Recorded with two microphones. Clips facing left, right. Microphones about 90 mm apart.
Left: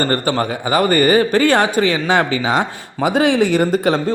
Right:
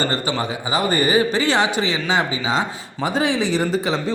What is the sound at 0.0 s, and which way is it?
A man's voice, 50° left (ahead or behind).